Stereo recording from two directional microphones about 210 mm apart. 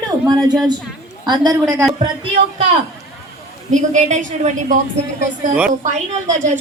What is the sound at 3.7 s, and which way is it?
A woman's voice, 35° right (ahead or behind).